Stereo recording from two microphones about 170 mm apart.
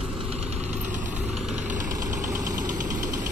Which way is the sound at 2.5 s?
50° right (ahead or behind).